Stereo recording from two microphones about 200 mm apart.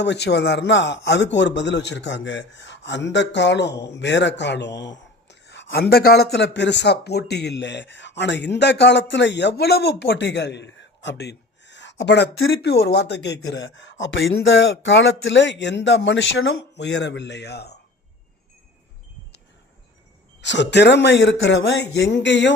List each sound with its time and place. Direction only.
0.0 s speech: 60° left (ahead or behind)
20.4 s speech: 60° left (ahead or behind)